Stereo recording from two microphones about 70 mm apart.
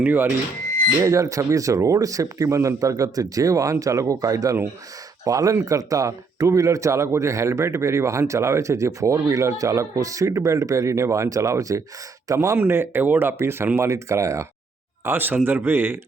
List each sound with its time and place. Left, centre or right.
0.0 s speech: right
1.0 s speech: right
12.5 s speech: right
15.0 s speech: right